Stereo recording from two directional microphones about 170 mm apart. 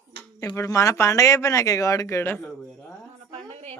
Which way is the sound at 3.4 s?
40° right (ahead or behind).